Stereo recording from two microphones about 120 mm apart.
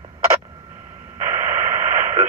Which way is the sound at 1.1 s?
25° right (ahead or behind).